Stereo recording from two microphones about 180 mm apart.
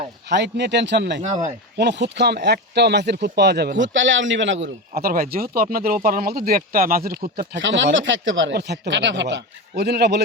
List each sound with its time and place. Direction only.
0.3 s speech: 70° right (ahead or behind)
1.2 s speech: 40° right (ahead or behind)
1.8 s speech: 70° right (ahead or behind); by 7.4 s 55° right (ahead or behind)
7.5 s a man's voice: 90° right; by 10.2 s 65° right (ahead or behind)